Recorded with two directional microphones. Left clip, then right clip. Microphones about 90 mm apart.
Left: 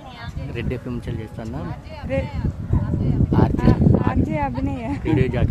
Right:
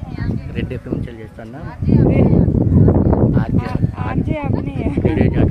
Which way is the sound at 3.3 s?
30° left (ahead or behind).